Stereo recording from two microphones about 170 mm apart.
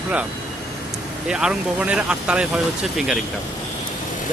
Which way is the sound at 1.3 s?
5° right (ahead or behind).